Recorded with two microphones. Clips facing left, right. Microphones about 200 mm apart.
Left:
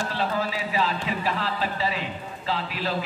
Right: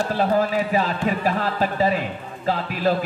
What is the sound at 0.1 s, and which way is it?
A man's voice, 50° right (ahead or behind).